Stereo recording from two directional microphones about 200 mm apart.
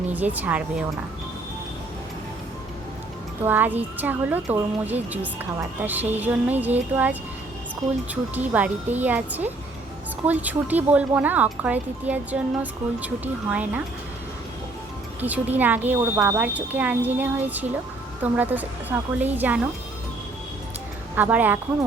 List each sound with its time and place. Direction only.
0.1 s speech: 10° right (ahead or behind)
3.4 s speech: 10° right (ahead or behind)
15.2 s speech: 10° right (ahead or behind)
21.2 s speech: 10° right (ahead or behind)